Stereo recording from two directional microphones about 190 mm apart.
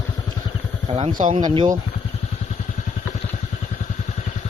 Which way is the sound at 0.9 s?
30° right (ahead or behind).